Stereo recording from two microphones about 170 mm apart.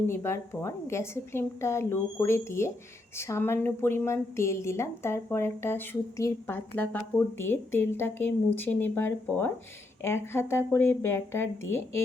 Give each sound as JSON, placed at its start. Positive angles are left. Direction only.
{"t": 0.1, "sound": "a woman's voice", "side_deg": 15}